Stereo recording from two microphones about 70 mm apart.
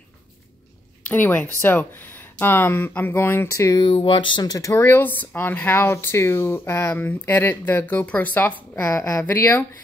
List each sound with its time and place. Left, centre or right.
1.0 s speech: left
4.8 s speech: left
8.9 s speech: left
9.2 s speech: left